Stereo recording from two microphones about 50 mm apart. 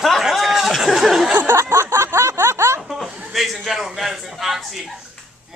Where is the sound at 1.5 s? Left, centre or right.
Right.